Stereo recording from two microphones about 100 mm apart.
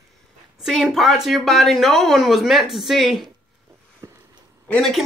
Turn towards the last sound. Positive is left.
turn(degrees=5)  # may be behind; listen again after turning